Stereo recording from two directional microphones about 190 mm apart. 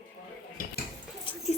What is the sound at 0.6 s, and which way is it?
Cutlery, 50° left (ahead or behind).